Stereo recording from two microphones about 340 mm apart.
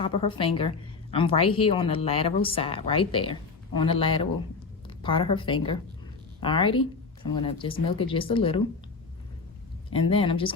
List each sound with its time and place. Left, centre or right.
0.0 s a woman's voice: centre
9.9 s a woman's voice: centre